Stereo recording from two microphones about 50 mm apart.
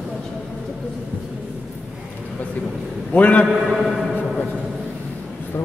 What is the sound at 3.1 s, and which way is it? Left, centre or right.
Speech, left.